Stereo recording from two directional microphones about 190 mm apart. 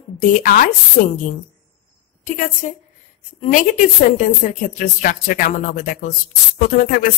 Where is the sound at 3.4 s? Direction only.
45° left (ahead or behind).